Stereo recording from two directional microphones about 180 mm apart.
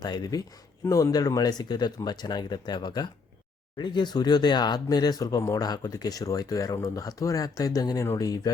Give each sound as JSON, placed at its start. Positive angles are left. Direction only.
{"t": 0.0, "sound": "speech", "side_deg": 25}